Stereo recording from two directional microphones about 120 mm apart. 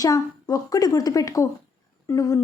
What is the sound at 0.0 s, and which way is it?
A woman's voice, 30° left (ahead or behind).